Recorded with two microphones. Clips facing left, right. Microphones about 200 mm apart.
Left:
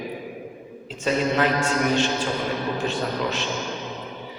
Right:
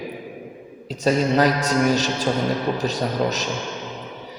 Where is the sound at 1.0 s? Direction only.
40° right (ahead or behind).